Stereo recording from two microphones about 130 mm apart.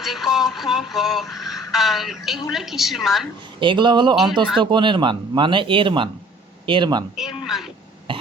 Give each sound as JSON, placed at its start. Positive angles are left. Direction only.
{"t": 0.0, "sound": "speech", "side_deg": 0}
{"t": 3.6, "sound": "speech", "side_deg": -40}
{"t": 4.1, "sound": "speech", "side_deg": 0}
{"t": 4.6, "sound": "speech", "side_deg": -35}
{"t": 7.2, "sound": "a sound", "side_deg": -5}
{"t": 8.1, "sound": "cough", "side_deg": -40}